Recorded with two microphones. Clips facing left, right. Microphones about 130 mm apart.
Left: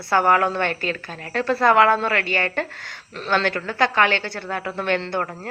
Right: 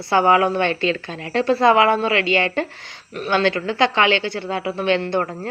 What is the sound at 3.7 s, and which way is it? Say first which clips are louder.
Speech: even; 20° right (ahead or behind).